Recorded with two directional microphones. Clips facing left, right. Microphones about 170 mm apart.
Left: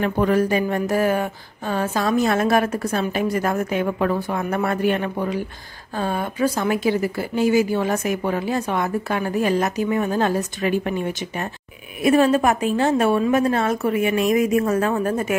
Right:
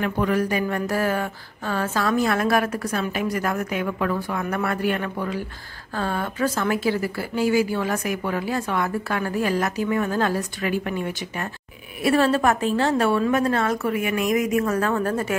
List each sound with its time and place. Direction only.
0.0 s speech: 30° left (ahead or behind)